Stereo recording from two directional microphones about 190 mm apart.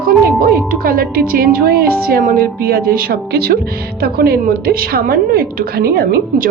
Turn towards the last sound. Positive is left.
turn(degrees=-50)  # may be behind; listen again after turning